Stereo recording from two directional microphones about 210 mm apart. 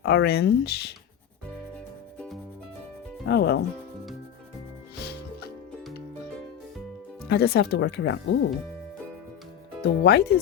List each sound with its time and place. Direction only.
0.0 s speech: 55° left (ahead or behind)
2.1 s music: 5° left (ahead or behind)
3.2 s speech: 50° left (ahead or behind)
7.3 s speech: 50° left (ahead or behind)
9.8 s speech: 50° left (ahead or behind)